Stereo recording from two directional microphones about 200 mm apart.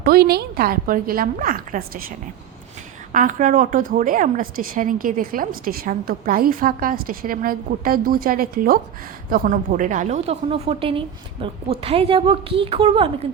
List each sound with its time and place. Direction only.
0.0 s a woman's voice: 50° right (ahead or behind); by 13.1 s 25° right (ahead or behind)